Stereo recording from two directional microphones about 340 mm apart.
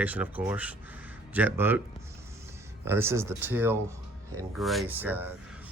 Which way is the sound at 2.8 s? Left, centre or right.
Centre.